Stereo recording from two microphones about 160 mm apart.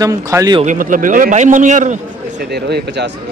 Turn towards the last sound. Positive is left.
turn(degrees=-90)